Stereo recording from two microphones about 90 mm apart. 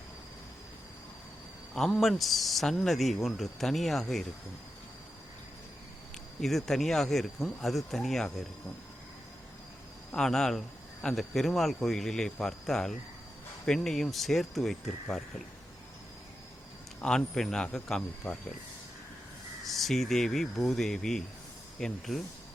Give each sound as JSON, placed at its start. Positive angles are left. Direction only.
{"t": 2.0, "sound": "speech", "side_deg": 0}
{"t": 6.4, "sound": "speech", "side_deg": 5}
{"t": 10.1, "sound": "speech", "side_deg": 5}
{"t": 17.0, "sound": "speech", "side_deg": 5}
{"t": 19.6, "sound": "speech", "side_deg": 0}